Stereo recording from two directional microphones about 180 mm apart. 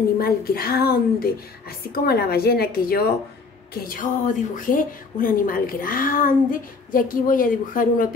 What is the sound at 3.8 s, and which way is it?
Speech, 45° left (ahead or behind).